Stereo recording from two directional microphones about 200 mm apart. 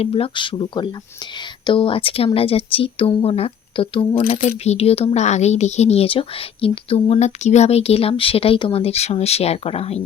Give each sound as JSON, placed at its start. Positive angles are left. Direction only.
{"t": 0.0, "sound": "speech", "side_deg": 30}